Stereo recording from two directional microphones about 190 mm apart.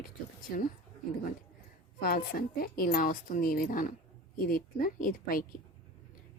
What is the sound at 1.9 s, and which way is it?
A woman's voice, 50° left (ahead or behind).